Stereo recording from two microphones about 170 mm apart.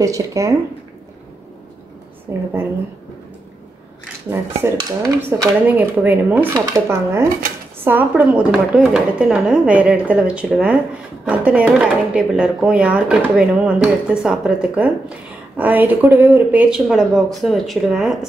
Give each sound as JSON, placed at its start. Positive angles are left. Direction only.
{"t": 0.0, "sound": "speech", "side_deg": -20}
{"t": 2.3, "sound": "speech", "side_deg": -10}
{"t": 4.6, "sound": "speech", "side_deg": -15}